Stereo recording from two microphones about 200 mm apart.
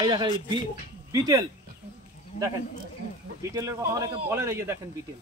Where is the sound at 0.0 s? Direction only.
25° right (ahead or behind).